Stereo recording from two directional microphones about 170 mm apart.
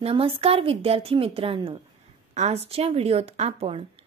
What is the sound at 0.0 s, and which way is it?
Speech, 30° right (ahead or behind).